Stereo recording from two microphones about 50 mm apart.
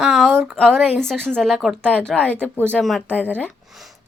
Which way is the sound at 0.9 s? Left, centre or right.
Centre.